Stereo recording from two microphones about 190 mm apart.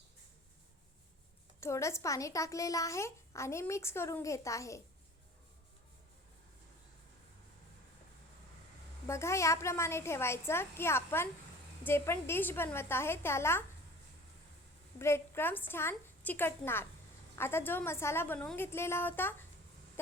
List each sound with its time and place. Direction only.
1.6 s a woman's voice: 15° left (ahead or behind)
9.0 s a woman's voice: 15° left (ahead or behind)
14.9 s a woman's voice: 15° left (ahead or behind)